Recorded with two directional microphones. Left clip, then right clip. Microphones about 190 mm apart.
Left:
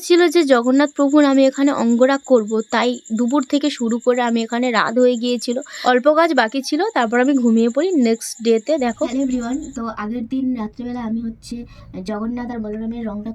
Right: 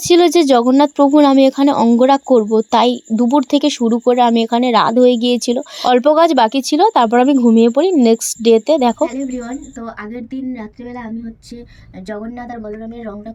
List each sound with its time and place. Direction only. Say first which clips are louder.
0.1 s speech: right 3 dB; 20° right (ahead or behind)